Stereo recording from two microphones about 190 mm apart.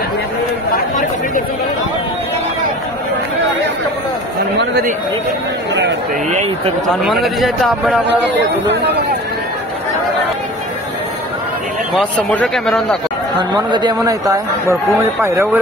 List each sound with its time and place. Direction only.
7.0 s a man's voice: centre (ahead or behind)
8.1 s speech: 65° right (ahead or behind)
11.9 s a man's voice: centre (ahead or behind)
13.4 s speech: 25° right (ahead or behind)